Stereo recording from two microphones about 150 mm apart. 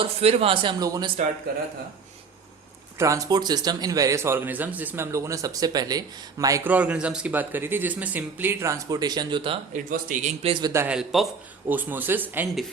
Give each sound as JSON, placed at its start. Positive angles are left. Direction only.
{"t": 0.0, "sound": "speech", "side_deg": -40}
{"t": 3.0, "sound": "speech", "side_deg": -20}
{"t": 6.7, "sound": "speech", "side_deg": -10}
{"t": 9.7, "sound": "speech", "side_deg": -60}
{"t": 10.4, "sound": "speech", "side_deg": -35}
{"t": 10.7, "sound": "speech", "side_deg": -15}
{"t": 10.9, "sound": "a man's voice", "side_deg": 0}
{"t": 11.7, "sound": "speech", "side_deg": -10}